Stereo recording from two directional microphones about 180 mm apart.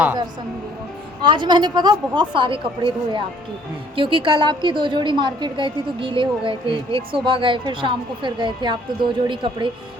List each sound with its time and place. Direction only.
1.2 s a woman's voice: 25° right (ahead or behind)